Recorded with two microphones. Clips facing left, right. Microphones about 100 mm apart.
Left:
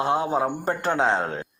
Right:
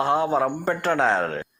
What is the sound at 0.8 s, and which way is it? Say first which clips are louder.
Speech: right 1 dB; 25° left (ahead or behind).